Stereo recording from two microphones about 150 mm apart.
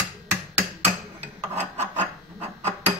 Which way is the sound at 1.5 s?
15° right (ahead or behind).